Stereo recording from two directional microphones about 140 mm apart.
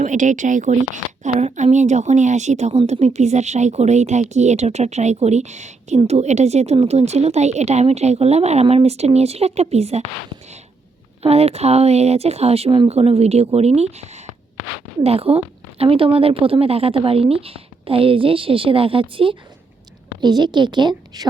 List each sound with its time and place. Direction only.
0.0 s a woman's voice: 65° right (ahead or behind)
11.2 s a woman's voice: 45° right (ahead or behind); by 21.2 s 30° right (ahead or behind)